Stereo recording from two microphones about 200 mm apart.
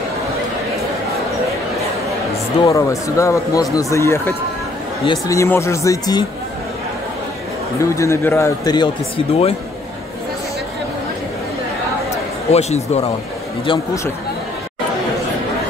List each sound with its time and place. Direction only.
2.7 s speech: 15° left (ahead or behind)
7.8 s speech: 15° left (ahead or behind)
12.4 s speech: 30° left (ahead or behind)